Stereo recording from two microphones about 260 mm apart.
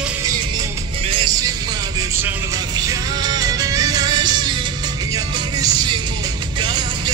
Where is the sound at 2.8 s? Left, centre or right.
Centre.